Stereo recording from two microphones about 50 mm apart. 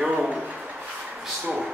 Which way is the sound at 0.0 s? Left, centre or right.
Centre.